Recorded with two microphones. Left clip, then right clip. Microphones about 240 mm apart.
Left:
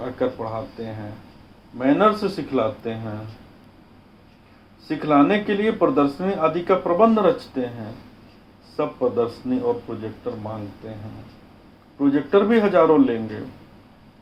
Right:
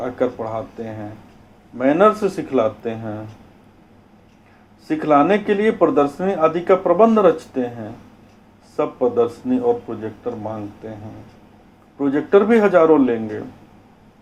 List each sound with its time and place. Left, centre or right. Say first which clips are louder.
0.0 s speech: right 3 dB; right
4.9 s speech: right 3 dB; right
11.9 s speech: right 3 dB; right